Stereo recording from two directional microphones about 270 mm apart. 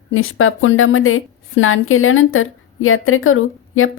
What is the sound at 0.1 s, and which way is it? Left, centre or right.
A woman's voice, left.